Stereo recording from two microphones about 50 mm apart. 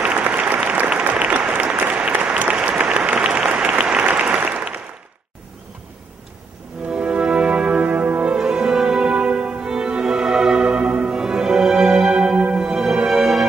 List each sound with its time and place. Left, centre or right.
0.1 s applause: right
3.3 s applause: centre
6.9 s music: centre
9.1 s music: right